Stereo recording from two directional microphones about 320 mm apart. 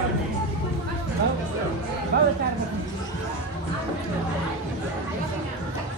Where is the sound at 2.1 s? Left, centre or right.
Right.